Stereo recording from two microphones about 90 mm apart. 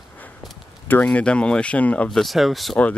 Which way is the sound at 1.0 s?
10° left (ahead or behind).